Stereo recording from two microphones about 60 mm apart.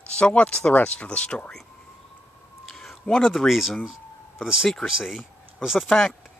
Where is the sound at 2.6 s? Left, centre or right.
Centre.